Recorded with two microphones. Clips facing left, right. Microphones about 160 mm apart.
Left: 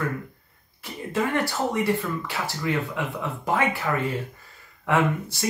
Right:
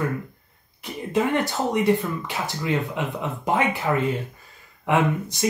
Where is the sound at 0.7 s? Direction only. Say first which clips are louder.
Right 3 dB; 20° right (ahead or behind).